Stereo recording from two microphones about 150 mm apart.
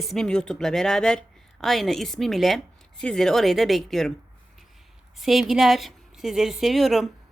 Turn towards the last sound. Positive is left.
turn(degrees=0)  # may be behind; listen again after turning